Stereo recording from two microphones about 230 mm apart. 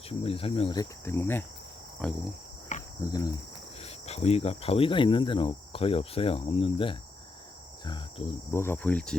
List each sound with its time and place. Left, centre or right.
0.1 s cricket: left; by 2.3 s centre
2.7 s cricket: left
3.1 s cricket: centre
3.8 s cricket: left
8.5 s cricket: centre